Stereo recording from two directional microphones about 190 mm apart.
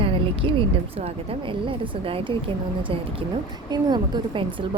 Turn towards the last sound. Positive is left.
turn(degrees=-25)  # may be behind; listen again after turning